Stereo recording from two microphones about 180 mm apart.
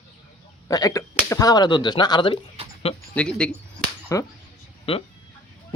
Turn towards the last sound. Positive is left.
turn(degrees=35)  # may be behind; listen again after turning